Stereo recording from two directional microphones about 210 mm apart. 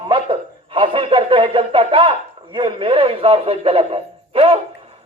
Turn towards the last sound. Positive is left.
turn(degrees=-25)  # may be behind; listen again after turning